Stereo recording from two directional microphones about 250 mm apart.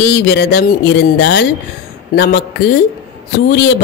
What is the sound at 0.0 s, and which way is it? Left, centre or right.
Speech, left.